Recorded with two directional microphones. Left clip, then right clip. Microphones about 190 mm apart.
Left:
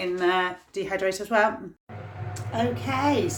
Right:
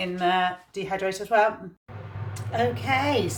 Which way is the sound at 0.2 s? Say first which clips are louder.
Right 2 dB; 30° left (ahead or behind).